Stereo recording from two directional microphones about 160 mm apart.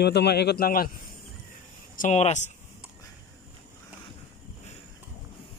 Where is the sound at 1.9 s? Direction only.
50° left (ahead or behind).